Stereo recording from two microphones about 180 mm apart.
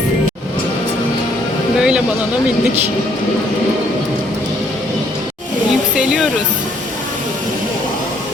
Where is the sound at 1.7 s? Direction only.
5° right (ahead or behind).